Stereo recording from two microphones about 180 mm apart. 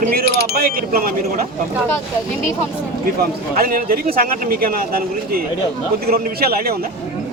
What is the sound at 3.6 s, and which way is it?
A man's voice, 55° right (ahead or behind).